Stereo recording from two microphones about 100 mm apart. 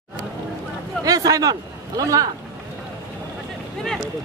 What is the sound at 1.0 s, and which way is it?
A man's voice, 40° right (ahead or behind).